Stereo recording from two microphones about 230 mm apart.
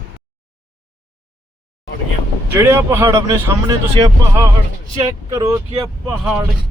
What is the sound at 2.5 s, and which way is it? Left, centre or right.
Speech, centre.